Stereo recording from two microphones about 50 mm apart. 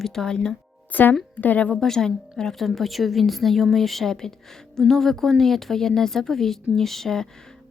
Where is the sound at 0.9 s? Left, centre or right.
Left.